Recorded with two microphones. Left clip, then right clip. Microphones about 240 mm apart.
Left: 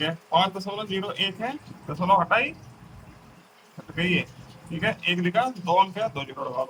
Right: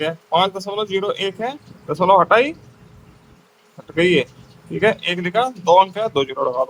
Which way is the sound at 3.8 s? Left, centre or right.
Right.